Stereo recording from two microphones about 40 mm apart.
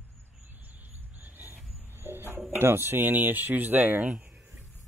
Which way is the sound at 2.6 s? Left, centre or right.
Right.